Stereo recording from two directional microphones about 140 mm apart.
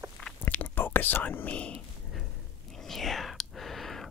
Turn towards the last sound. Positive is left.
turn(degrees=0)  # may be behind; listen again after turning